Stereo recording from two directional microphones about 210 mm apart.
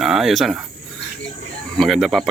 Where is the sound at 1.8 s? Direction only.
Centre (ahead or behind).